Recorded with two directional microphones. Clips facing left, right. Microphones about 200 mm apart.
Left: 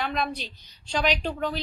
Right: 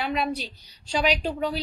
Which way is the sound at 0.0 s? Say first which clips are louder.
Right 2 dB; 10° right (ahead or behind).